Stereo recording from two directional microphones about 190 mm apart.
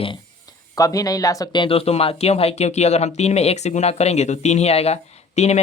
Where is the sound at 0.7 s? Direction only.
20° left (ahead or behind).